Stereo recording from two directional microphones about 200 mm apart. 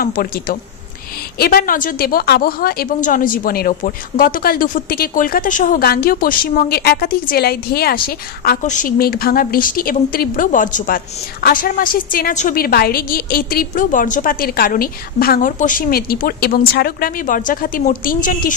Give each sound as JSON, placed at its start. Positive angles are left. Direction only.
{"t": 0.0, "sound": "a woman's voice", "side_deg": 45}